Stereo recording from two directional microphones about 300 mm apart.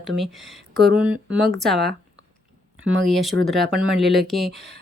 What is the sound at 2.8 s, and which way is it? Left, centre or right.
Speech, centre.